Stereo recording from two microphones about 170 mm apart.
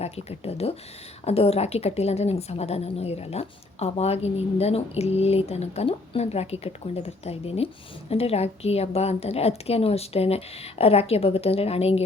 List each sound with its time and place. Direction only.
0.0 s a woman's voice: 35° left (ahead or behind)